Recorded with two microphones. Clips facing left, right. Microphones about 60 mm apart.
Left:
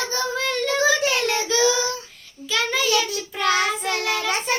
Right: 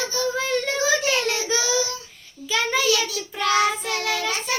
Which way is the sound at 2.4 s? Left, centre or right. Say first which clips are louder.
Right 1 dB; centre.